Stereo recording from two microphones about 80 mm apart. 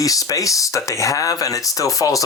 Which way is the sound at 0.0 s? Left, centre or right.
Left.